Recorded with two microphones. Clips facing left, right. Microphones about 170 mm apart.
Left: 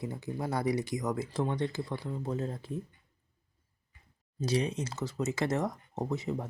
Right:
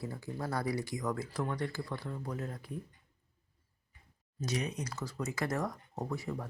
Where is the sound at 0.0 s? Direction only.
20° left (ahead or behind).